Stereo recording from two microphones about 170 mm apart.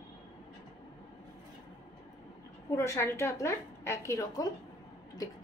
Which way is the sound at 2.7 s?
15° left (ahead or behind).